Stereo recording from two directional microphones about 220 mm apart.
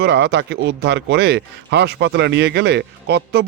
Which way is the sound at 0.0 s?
50° right (ahead or behind).